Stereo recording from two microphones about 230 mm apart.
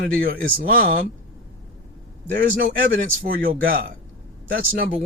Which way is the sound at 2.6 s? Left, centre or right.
Right.